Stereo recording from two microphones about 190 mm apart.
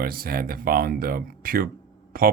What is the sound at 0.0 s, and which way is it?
A man's voice, 50° right (ahead or behind).